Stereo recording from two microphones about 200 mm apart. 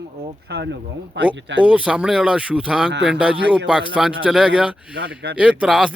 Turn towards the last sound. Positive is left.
turn(degrees=-5)  # may be behind; listen again after turning